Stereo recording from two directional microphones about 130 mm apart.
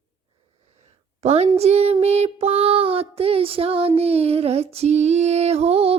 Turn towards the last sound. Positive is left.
turn(degrees=-50)  # may be behind; listen again after turning